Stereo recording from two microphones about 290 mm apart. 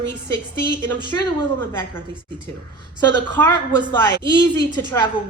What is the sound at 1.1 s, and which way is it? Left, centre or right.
A woman's voice, centre.